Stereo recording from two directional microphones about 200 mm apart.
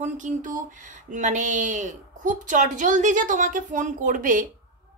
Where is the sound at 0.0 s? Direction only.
40° right (ahead or behind).